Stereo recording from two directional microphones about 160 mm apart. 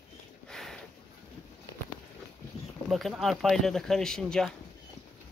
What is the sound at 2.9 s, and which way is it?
Speech, centre (ahead or behind).